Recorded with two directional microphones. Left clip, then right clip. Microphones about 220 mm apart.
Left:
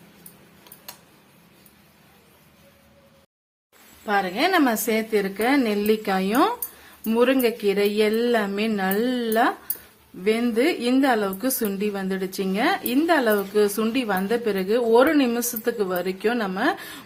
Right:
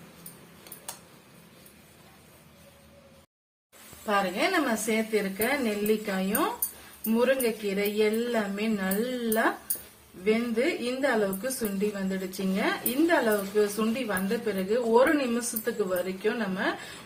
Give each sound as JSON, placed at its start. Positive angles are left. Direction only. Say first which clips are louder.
{"t": 4.0, "sound": "a woman's voice", "louder": "left 4 dB", "side_deg": 30}
{"t": 4.7, "sound": "speech", "louder": "left 5 dB", "side_deg": 50}